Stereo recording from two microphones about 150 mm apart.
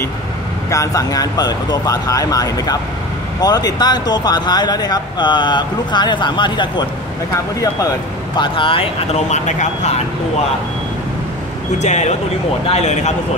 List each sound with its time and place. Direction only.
0.7 s speech: 20° left (ahead or behind)
8.4 s speech: 35° left (ahead or behind); by 10.0 s 50° left (ahead or behind)
11.8 s speech: 50° left (ahead or behind)